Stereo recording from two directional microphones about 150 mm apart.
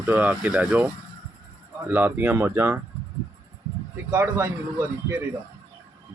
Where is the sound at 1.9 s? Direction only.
10° right (ahead or behind).